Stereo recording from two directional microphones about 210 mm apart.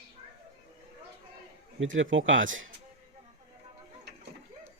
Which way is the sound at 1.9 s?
65° right (ahead or behind).